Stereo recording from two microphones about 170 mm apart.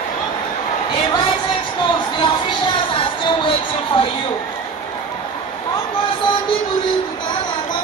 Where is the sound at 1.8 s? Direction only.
30° left (ahead or behind).